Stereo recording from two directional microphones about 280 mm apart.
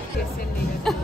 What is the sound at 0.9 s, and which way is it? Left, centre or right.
Music, centre.